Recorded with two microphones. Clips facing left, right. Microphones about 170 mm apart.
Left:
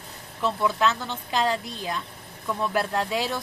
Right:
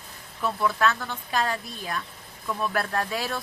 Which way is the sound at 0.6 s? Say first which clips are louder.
Even; 20° left (ahead or behind).